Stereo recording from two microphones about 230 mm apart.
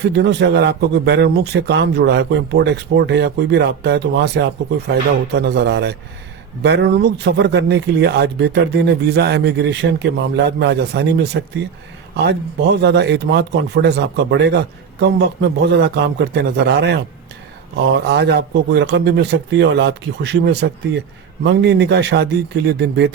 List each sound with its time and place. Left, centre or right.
0.1 s speech: right
18.1 s speech: right